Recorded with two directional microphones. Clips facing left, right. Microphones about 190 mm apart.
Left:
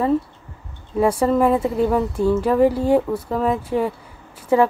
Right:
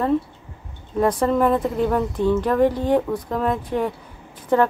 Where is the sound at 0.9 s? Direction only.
5° left (ahead or behind).